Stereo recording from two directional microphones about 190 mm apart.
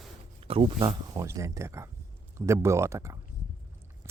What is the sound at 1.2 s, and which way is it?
Speech, 15° right (ahead or behind).